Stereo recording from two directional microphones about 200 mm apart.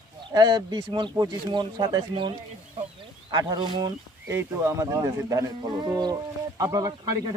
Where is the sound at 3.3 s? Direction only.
20° right (ahead or behind).